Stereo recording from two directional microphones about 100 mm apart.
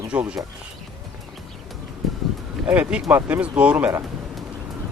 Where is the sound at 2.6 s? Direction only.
15° right (ahead or behind).